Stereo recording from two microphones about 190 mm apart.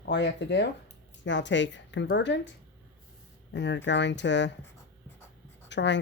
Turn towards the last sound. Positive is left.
turn(degrees=70)  # may be behind; listen again after turning